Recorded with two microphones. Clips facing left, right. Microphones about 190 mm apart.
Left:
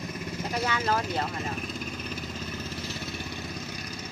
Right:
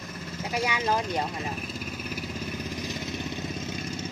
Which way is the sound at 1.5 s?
5° right (ahead or behind).